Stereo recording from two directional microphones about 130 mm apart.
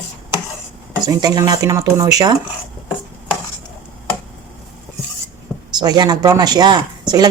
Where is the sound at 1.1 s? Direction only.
30° right (ahead or behind).